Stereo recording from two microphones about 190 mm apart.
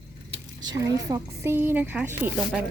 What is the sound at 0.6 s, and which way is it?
Speech, 20° right (ahead or behind).